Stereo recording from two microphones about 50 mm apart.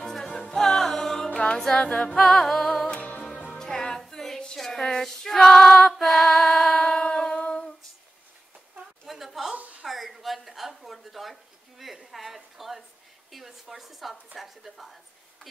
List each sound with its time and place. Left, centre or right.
0.0 s music: centre
1.3 s music: left
1.6 s a sound: centre
2.2 s music: centre
3.0 s music: left
3.5 s music: centre
4.6 s female singing: centre
7.1 s humming: centre
9.0 s a sound: centre
9.6 s a sound: right
9.8 s a sound: centre
13.3 s a woman's voice: centre